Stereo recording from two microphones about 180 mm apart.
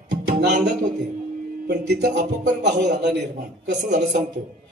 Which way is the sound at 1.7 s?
70° right (ahead or behind).